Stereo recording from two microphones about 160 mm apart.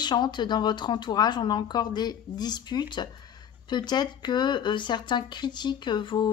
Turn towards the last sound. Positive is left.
turn(degrees=30)  # may be behind; listen again after turning